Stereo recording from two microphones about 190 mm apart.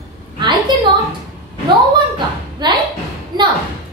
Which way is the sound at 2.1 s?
25° right (ahead or behind).